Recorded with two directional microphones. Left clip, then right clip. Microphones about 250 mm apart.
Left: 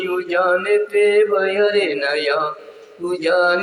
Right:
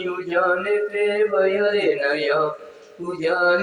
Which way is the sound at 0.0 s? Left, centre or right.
Left.